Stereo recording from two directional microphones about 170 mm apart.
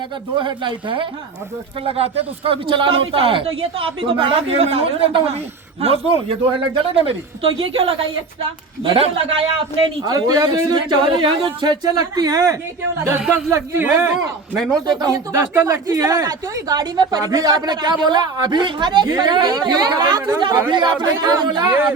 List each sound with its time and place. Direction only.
0.3 s speech: 30° right (ahead or behind)
10.0 s speech: 25° right (ahead or behind)
13.1 s speech: 10° right (ahead or behind)
14.5 s a man's voice: centre (ahead or behind)
14.8 s speech: 20° right (ahead or behind)